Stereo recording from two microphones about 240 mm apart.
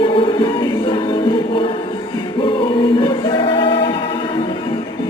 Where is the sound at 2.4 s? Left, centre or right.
Centre.